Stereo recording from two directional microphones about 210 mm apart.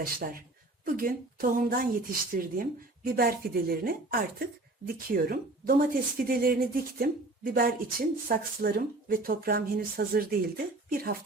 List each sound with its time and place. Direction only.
0.0 s speech: 40° right (ahead or behind)